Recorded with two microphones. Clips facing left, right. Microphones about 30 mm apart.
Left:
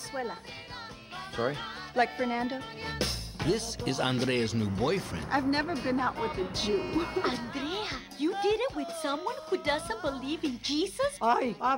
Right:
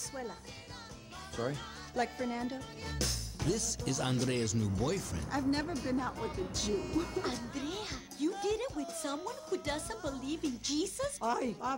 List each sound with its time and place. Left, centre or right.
1.3 s music: left